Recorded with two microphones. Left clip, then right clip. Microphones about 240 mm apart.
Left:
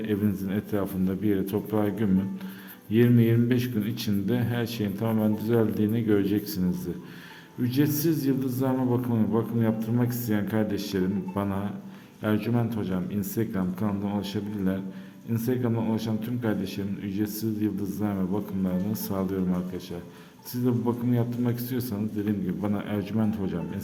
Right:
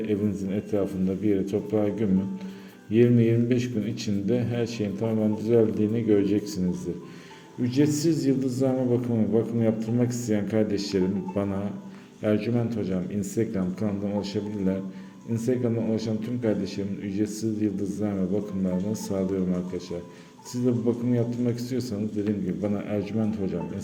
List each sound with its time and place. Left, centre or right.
0.0 s a man's voice: centre